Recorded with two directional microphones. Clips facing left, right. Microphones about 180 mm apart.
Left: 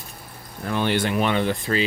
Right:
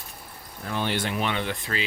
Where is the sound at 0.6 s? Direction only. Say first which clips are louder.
Left 5 dB; 65° left (ahead or behind); by 1.8 s 40° left (ahead or behind).